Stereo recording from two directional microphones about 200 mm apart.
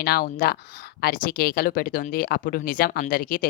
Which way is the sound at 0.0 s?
50° left (ahead or behind).